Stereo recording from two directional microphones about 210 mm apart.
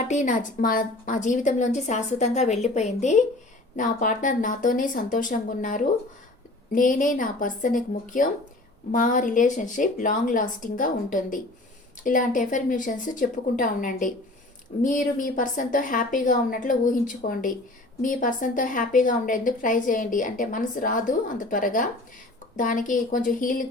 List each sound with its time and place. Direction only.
0.0 s a woman's voice: 35° left (ahead or behind)